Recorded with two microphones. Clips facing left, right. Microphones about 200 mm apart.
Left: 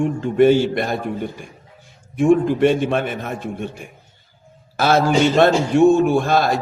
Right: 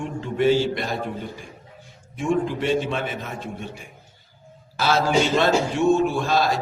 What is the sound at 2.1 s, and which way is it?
A man's voice, 55° left (ahead or behind).